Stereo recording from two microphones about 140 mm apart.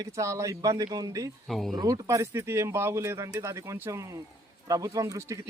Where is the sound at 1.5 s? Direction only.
Centre (ahead or behind).